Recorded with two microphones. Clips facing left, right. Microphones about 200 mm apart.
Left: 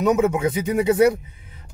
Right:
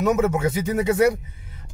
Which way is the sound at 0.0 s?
15° left (ahead or behind).